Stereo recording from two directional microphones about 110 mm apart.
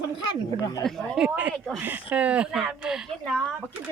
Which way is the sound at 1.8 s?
15° right (ahead or behind).